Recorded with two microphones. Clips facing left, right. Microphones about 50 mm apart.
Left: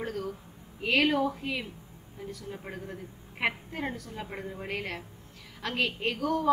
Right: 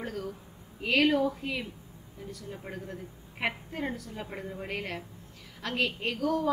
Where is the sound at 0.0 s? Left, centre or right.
Centre.